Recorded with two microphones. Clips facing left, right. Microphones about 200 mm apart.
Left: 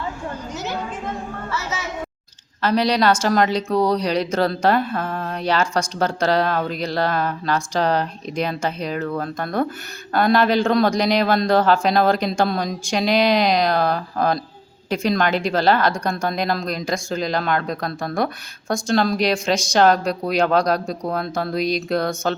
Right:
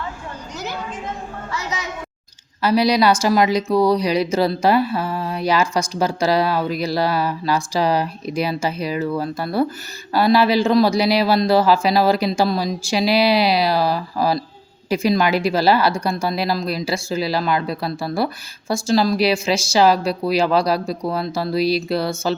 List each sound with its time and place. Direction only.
1.5 s a man's voice: 15° right (ahead or behind)